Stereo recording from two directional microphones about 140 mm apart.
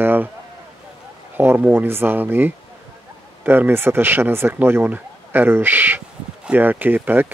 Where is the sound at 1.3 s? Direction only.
15° right (ahead or behind).